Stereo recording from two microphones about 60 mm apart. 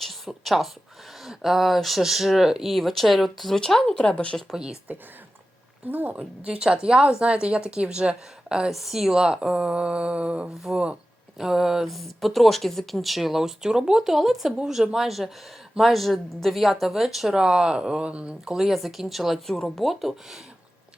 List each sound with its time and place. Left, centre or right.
0.0 s a sound: centre
1.2 s speech: centre
4.1 s speech: centre
4.5 s a woman's voice: centre
5.9 s a woman's voice: right
6.4 s a woman's voice: centre
8.7 s a woman's voice: centre
10.6 s a woman's voice: centre
18.4 s speech: centre